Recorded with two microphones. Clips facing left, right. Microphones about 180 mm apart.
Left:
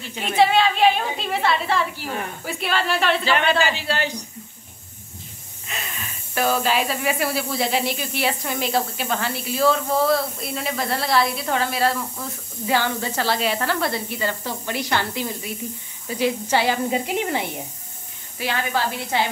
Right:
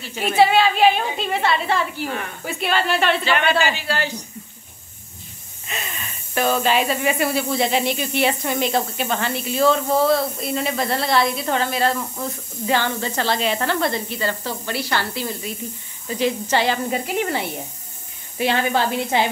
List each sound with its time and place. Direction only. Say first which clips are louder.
0.2 s speech: right 2 dB; 5° right (ahead or behind)
3.3 s speech: right 1 dB; 30° left (ahead or behind)
5.7 s speech: right 2 dB; centre (ahead or behind)
18.4 s a woman's voice: right 4 dB; 25° right (ahead or behind)